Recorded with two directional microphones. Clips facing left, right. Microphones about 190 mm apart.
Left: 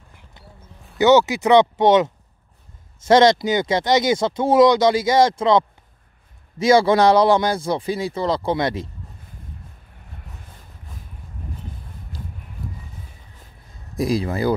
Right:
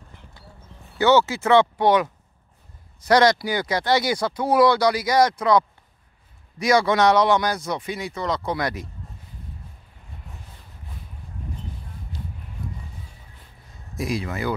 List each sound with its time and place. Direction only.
0.9 s speech: 15° left (ahead or behind)
3.1 s speech: 25° left (ahead or behind)
13.9 s speech: 35° left (ahead or behind)